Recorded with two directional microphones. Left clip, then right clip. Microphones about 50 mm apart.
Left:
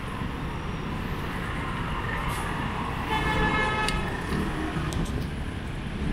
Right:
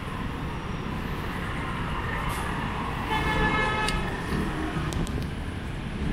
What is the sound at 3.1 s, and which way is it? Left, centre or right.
Vehicle, centre.